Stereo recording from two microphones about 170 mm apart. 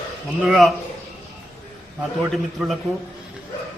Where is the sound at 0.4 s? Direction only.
Centre (ahead or behind).